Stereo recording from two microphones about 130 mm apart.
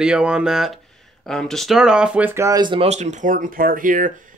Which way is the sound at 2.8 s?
60° right (ahead or behind).